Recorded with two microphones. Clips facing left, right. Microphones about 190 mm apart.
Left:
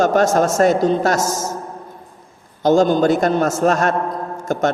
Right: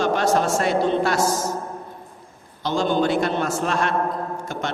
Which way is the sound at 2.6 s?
45° left (ahead or behind).